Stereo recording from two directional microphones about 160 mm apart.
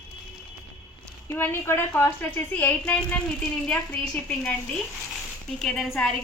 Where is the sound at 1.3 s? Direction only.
15° left (ahead or behind).